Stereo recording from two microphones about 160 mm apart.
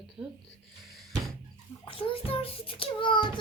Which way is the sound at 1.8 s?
35° left (ahead or behind).